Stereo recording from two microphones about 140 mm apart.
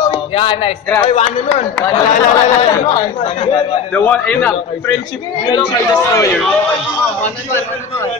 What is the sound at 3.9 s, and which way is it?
Speech, 10° left (ahead or behind).